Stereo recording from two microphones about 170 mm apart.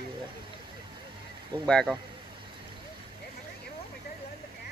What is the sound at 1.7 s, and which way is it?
Speech, 5° left (ahead or behind).